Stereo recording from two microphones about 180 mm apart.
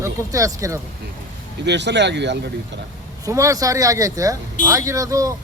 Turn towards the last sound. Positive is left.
turn(degrees=-20)  # may be behind; listen again after turning